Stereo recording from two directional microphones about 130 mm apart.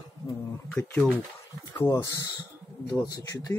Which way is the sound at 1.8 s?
25° left (ahead or behind).